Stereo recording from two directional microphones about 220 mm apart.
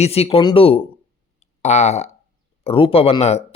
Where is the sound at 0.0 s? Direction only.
25° left (ahead or behind).